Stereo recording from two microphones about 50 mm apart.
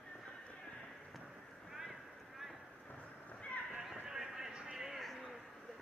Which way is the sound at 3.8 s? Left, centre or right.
Centre.